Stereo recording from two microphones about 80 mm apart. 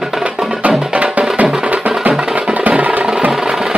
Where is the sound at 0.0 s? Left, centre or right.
Centre.